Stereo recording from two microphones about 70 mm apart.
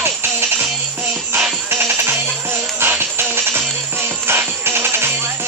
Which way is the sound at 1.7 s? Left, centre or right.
Right.